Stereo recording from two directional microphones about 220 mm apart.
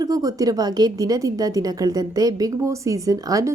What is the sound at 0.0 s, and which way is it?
A woman's voice, 15° right (ahead or behind).